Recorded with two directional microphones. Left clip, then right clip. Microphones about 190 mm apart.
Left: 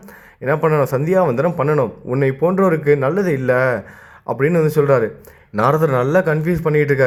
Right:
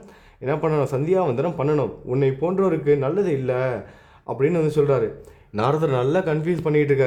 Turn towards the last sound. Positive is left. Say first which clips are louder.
# left 4 dB
turn(degrees=10)  # may be behind; listen again after turning